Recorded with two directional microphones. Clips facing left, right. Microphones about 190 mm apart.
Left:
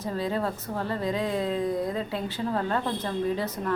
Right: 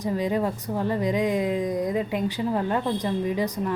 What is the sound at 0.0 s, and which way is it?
A woman's voice, 15° right (ahead or behind).